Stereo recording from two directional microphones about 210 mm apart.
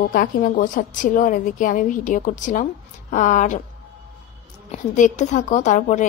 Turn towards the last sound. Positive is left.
turn(degrees=35)  # may be behind; listen again after turning